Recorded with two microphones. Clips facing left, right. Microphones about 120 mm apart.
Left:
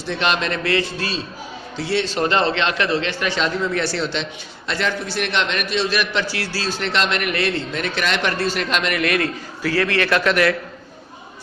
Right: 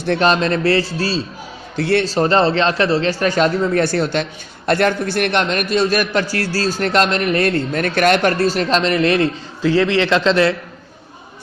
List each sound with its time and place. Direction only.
0.2 s a man's voice: 35° right (ahead or behind)
1.7 s a man's voice: 55° right (ahead or behind)
2.0 s a man's voice: 35° right (ahead or behind)